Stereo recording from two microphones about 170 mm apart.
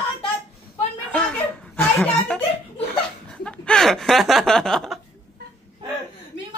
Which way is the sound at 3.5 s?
5° left (ahead or behind).